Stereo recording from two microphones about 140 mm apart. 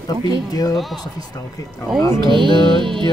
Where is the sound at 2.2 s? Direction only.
35° right (ahead or behind).